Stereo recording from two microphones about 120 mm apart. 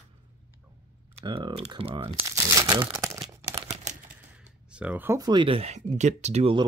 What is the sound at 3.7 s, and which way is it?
Typing, 75° right (ahead or behind).